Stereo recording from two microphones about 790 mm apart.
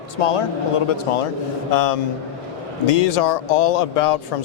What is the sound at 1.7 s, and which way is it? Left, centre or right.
Speech, left.